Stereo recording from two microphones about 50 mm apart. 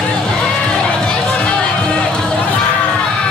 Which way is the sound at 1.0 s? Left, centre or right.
Centre.